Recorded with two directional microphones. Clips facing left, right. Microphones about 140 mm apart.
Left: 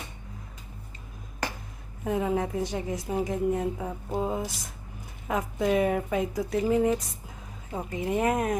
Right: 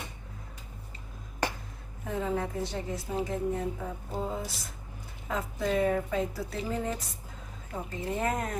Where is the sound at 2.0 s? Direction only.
15° left (ahead or behind).